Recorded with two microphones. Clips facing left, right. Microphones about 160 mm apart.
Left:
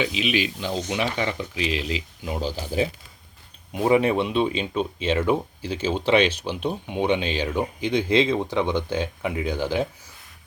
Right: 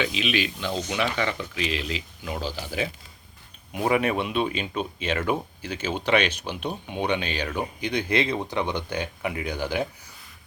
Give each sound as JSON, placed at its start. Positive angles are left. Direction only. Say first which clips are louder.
{"t": 0.0, "sound": "speech", "louder": "left 2 dB", "side_deg": 10}
{"t": 0.9, "sound": "speech", "louder": "even", "side_deg": 20}
{"t": 2.2, "sound": "speech", "louder": "left 3 dB", "side_deg": 20}
{"t": 3.7, "sound": "speech", "louder": "left 4 dB", "side_deg": 20}